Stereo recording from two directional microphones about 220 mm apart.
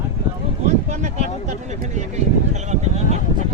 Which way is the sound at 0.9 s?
30° right (ahead or behind).